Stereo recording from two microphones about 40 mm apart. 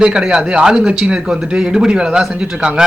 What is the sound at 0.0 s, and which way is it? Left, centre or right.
Speech, right.